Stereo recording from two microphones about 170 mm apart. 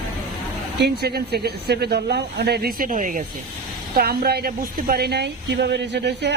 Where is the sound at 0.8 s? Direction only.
70° right (ahead or behind); by 3.2 s 50° right (ahead or behind).